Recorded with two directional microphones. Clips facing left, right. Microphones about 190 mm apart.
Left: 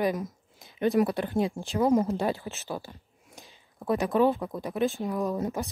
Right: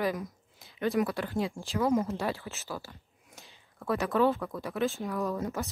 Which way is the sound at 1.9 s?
35° left (ahead or behind).